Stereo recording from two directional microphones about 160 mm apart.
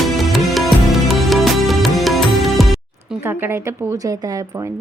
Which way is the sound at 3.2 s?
15° right (ahead or behind).